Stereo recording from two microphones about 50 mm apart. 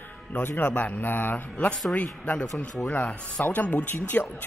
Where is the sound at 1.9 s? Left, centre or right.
Left.